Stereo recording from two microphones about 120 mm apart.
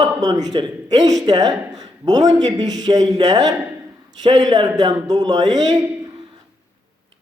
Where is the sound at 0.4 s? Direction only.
35° right (ahead or behind).